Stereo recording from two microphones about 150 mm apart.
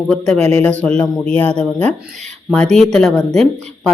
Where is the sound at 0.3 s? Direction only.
45° right (ahead or behind).